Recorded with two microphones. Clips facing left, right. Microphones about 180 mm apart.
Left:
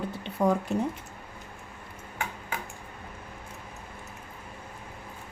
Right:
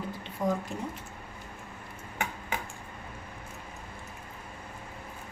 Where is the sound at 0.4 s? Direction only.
70° left (ahead or behind).